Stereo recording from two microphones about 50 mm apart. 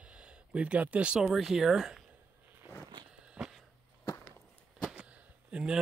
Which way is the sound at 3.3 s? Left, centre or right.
Centre.